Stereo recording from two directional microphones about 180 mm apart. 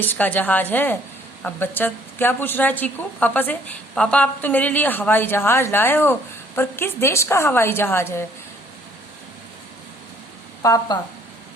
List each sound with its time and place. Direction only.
0.0 s speech: 10° left (ahead or behind)
10.6 s speech: 20° left (ahead or behind)